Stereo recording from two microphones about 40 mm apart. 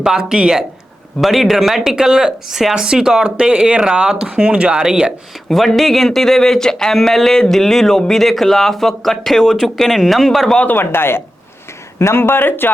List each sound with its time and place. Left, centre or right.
0.0 s speech: centre
1.2 s speech: centre
2.8 s speech: centre
4.3 s speech: right
5.5 s speech: centre
10.7 s speech: left